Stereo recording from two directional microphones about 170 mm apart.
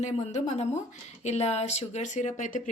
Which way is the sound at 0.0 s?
45° left (ahead or behind).